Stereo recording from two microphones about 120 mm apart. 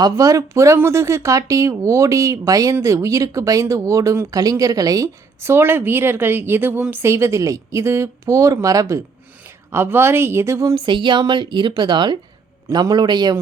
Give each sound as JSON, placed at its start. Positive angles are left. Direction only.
{"t": 0.0, "sound": "speech", "side_deg": -30}
{"t": 10.8, "sound": "a woman's voice", "side_deg": -40}